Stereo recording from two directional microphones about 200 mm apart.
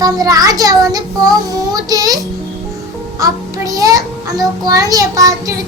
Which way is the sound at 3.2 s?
15° right (ahead or behind).